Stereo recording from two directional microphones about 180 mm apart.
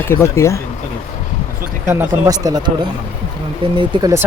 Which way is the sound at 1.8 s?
15° right (ahead or behind).